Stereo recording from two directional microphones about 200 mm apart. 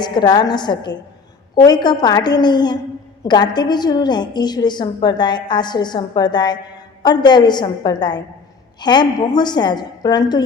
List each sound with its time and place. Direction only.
0.0 s a woman's voice: 20° left (ahead or behind)